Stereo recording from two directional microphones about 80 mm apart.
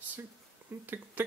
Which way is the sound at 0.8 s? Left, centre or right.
Right.